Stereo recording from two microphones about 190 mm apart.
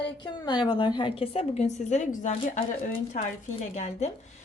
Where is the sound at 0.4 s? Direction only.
25° left (ahead or behind).